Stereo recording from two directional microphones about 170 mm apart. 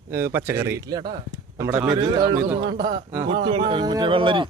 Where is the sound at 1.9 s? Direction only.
25° right (ahead or behind).